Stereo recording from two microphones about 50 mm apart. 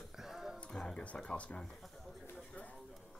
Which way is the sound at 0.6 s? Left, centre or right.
Centre.